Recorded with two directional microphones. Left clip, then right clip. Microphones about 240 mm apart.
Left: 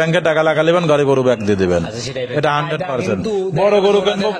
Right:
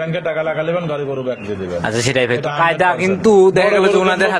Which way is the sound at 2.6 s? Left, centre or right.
Right.